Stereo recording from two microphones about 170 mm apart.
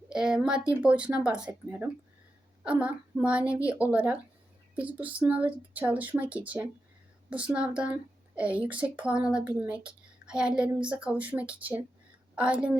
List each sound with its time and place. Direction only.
0.1 s a woman's voice: 5° right (ahead or behind)